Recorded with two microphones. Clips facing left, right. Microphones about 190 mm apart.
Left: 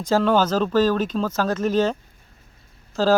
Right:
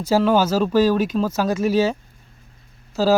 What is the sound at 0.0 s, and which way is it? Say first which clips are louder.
Speech: right 2 dB; 10° right (ahead or behind).